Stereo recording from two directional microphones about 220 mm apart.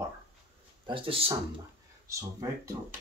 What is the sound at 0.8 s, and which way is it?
Speech, 25° right (ahead or behind).